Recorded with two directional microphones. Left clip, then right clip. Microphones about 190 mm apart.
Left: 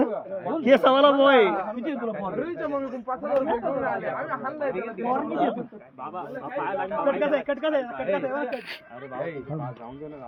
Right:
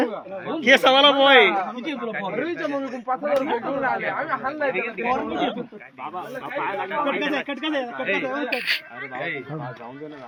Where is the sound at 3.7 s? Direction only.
60° right (ahead or behind).